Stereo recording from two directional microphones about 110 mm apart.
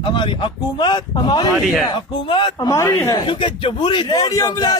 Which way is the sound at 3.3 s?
50° left (ahead or behind).